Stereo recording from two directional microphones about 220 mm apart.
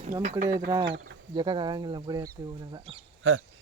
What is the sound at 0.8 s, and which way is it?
Speech, 50° right (ahead or behind).